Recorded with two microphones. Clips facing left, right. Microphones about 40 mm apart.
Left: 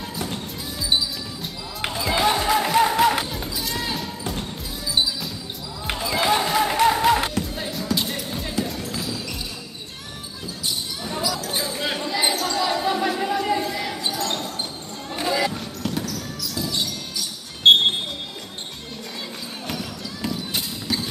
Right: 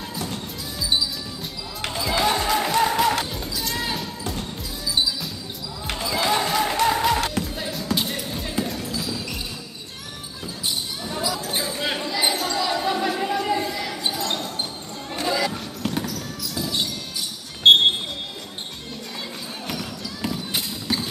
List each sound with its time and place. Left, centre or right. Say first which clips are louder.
0.3 s music: left 1 dB; centre
3.7 s basketball bounce: even; centre
4.2 s music: left 1 dB; centre
11.4 s basketball bounce: even; centre
15.1 s a sound: left 1 dB; centre
15.8 s basketball bounce: right 1 dB; centre
17.6 s music: even; centre
19.7 s run: even; centre